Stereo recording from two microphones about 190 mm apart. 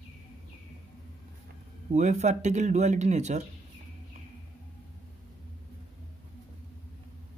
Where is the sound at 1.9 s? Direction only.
35° right (ahead or behind).